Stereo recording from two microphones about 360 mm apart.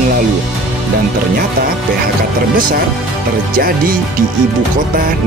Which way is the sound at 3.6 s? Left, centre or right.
Right.